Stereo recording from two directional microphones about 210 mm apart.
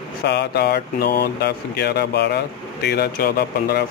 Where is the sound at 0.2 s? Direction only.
50° left (ahead or behind).